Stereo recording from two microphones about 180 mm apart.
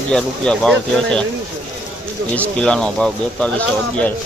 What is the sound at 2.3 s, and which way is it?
Speech, 5° left (ahead or behind).